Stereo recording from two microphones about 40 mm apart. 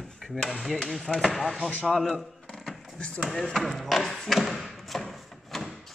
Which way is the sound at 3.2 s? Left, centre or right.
Centre.